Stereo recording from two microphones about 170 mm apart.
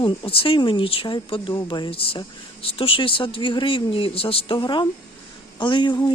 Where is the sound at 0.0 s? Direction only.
30° left (ahead or behind).